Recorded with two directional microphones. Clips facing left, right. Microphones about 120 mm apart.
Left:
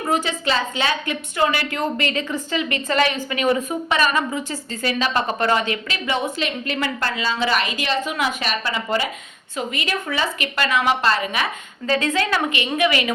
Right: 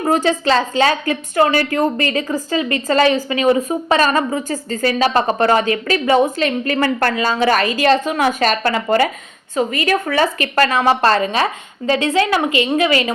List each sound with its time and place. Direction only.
0.1 s a woman's voice: 40° right (ahead or behind); by 9.0 s 55° right (ahead or behind)
9.6 s speech: 45° right (ahead or behind)
10.5 s a woman's voice: 40° right (ahead or behind)
11.9 s a woman's voice: 25° right (ahead or behind)